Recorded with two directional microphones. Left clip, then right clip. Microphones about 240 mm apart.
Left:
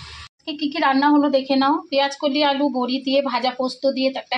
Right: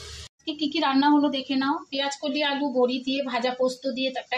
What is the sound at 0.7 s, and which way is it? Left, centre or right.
Speech, centre.